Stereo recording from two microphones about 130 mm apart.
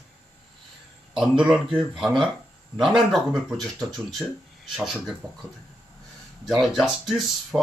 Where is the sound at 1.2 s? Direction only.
5° right (ahead or behind).